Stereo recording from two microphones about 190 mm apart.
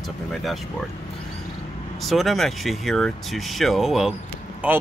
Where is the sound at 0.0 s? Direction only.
Centre (ahead or behind).